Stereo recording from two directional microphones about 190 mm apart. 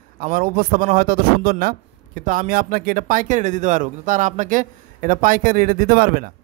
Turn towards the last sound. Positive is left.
turn(degrees=-50)  # may be behind; listen again after turning